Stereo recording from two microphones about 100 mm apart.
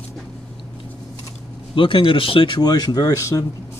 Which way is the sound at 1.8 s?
60° left (ahead or behind).